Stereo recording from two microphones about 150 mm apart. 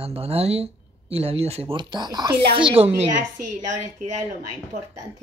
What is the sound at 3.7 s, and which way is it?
A woman's voice, 50° right (ahead or behind).